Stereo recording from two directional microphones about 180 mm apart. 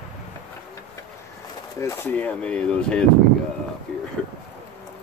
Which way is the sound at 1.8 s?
15° left (ahead or behind).